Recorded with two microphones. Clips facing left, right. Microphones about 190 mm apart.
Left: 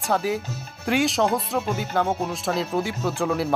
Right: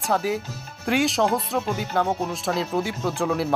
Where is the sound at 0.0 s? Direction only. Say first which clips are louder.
Even; centre (ahead or behind).